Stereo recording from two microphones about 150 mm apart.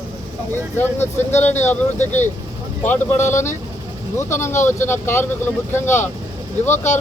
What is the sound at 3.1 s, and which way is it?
Speech, 50° left (ahead or behind).